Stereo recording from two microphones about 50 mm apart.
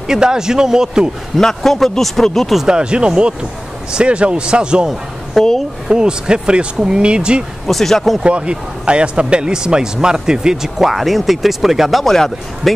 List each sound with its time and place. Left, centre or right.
0.1 s speech: centre
1.4 s a man's voice: centre
2.5 s speech: centre
5.4 s a man's voice: centre
5.9 s speech: centre
7.6 s a man's voice: centre
8.2 s speech: right; by 12.0 s centre
12.0 s speech: centre